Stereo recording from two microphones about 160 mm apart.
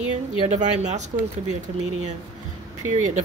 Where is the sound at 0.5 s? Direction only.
45° right (ahead or behind).